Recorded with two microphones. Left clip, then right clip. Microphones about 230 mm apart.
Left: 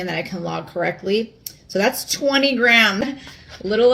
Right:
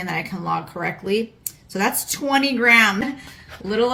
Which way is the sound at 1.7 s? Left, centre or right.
Centre.